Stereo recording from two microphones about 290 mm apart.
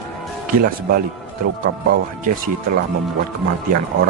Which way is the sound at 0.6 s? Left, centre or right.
Right.